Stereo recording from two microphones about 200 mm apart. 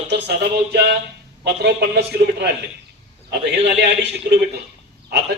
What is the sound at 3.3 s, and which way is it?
Speech, 55° right (ahead or behind).